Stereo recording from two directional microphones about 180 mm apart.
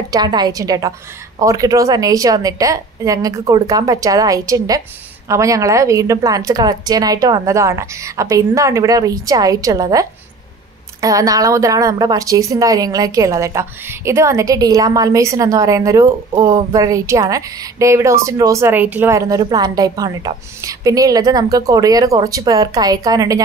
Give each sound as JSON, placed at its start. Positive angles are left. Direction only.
{"t": 0.1, "sound": "a woman's voice", "side_deg": -25}